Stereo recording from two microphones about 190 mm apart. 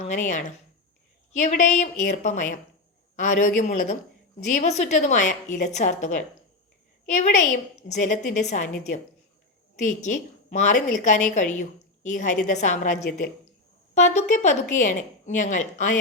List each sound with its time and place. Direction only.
0.0 s a woman's voice: 40° left (ahead or behind)
9.7 s a woman's voice: 40° left (ahead or behind)